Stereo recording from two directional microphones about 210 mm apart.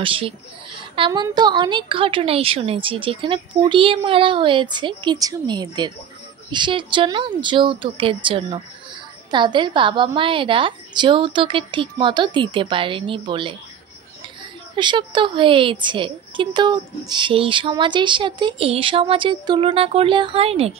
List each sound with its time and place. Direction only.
0.0 s a woman's voice: 25° right (ahead or behind)
14.8 s a woman's voice: 20° right (ahead or behind)